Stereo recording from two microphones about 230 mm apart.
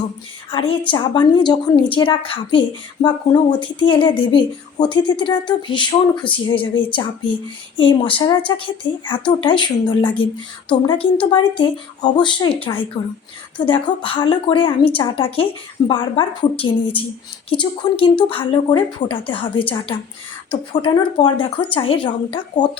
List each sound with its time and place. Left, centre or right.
0.5 s a woman's voice: left